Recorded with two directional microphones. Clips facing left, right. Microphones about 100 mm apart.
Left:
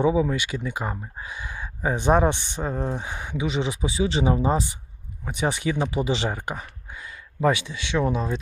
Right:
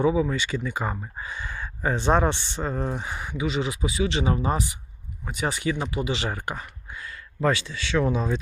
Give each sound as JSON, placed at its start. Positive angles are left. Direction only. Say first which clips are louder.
{"t": 0.0, "sound": "speech", "louder": "left 1 dB", "side_deg": 20}
{"t": 6.6, "sound": "a sound", "louder": "even", "side_deg": 15}
{"t": 8.0, "sound": "speech", "louder": "even", "side_deg": 0}